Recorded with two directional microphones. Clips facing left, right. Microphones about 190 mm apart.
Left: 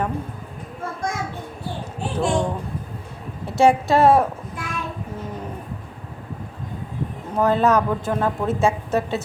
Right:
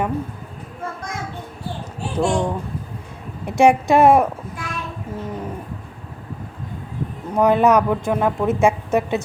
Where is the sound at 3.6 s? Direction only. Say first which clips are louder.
Right 2 dB; 15° right (ahead or behind).